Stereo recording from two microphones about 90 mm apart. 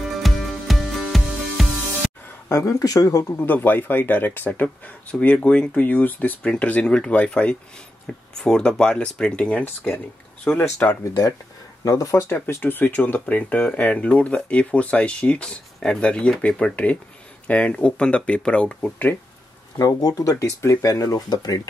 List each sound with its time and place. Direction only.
0.2 s music: centre (ahead or behind)
2.5 s speech: 35° left (ahead or behind)
3.3 s speech: 20° left (ahead or behind)
10.6 s speech: 25° left (ahead or behind)
11.8 s speech: 40° left (ahead or behind)
12.4 s speech: 25° left (ahead or behind)
19.8 s speech: 45° left (ahead or behind)